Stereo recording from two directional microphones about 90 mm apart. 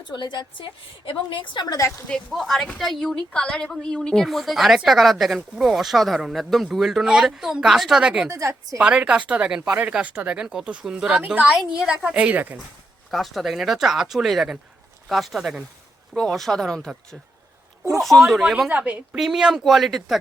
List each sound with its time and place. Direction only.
0.1 s a woman's voice: 55° left (ahead or behind)
1.0 s a woman's voice: 70° left (ahead or behind)
2.0 s speech: 5° left (ahead or behind)
8.3 s a woman's voice: 35° right (ahead or behind)
8.8 s speech: 10° right (ahead or behind)
13.1 s speech: centre (ahead or behind)
18.0 s speech: centre (ahead or behind)
18.7 s speech: 15° right (ahead or behind)
19.1 s speech: 5° right (ahead or behind)